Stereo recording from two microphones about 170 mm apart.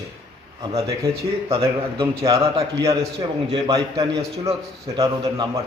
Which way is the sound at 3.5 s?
20° right (ahead or behind).